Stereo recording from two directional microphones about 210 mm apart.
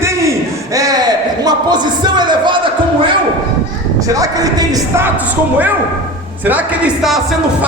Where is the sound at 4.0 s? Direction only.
15° right (ahead or behind).